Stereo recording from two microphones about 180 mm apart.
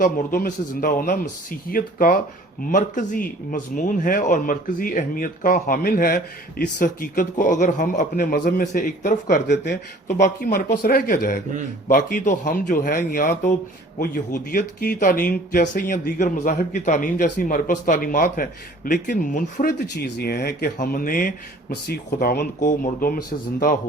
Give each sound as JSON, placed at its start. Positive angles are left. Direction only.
{"t": 0.0, "sound": "a man's voice", "side_deg": 50}
{"t": 20.1, "sound": "a man's voice", "side_deg": 60}
{"t": 20.7, "sound": "a man's voice", "side_deg": 50}
{"t": 21.8, "sound": "a man's voice", "side_deg": 60}